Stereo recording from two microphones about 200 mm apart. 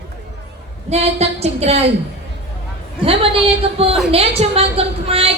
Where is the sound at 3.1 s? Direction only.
30° right (ahead or behind).